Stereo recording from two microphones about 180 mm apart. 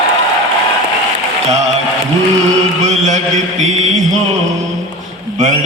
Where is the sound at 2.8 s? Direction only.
40° right (ahead or behind).